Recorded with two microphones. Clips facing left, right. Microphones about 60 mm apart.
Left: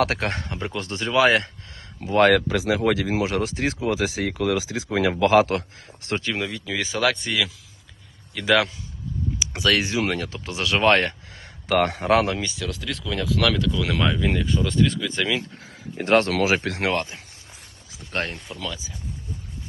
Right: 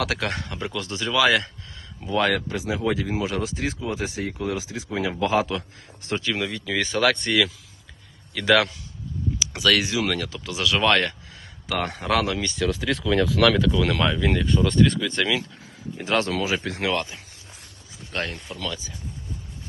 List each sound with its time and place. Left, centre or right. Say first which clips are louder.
0.0 s speech: left 3 dB; left
2.0 s speech: left 5 dB; left
2.5 s speech: left 4 dB; left
6.3 s speech: right 1 dB; centre
9.4 s speech: even; left
11.7 s speech: left 6 dB; left
12.0 s speech: even; left
12.4 s speech: right 5 dB; centre
16.0 s speech: left 5 dB; left
16.4 s speech: left 4 dB; left
18.3 s speech: right 1 dB; centre